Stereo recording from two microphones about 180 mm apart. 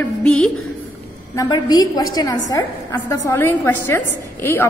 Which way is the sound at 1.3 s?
20° left (ahead or behind).